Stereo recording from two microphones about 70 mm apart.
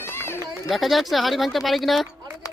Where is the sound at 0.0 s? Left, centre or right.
Left.